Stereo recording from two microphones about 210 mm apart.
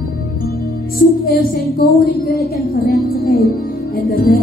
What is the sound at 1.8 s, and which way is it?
Speech, 45° left (ahead or behind).